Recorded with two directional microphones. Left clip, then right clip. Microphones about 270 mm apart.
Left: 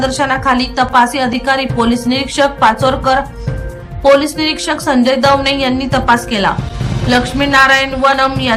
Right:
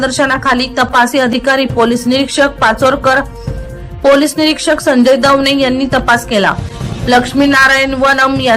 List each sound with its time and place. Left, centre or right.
0.0 s speech: centre
4.2 s speech: centre